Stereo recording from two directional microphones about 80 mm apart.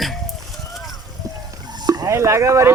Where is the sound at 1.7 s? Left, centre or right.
Right.